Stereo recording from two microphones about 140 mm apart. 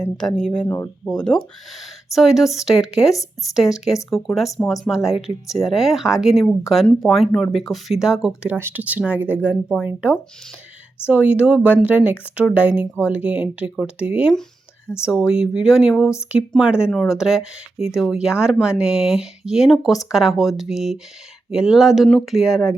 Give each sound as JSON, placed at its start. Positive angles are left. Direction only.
{"t": 0.3, "sound": "speech", "side_deg": 5}
{"t": 14.9, "sound": "speech", "side_deg": 15}
{"t": 15.3, "sound": "speech", "side_deg": -5}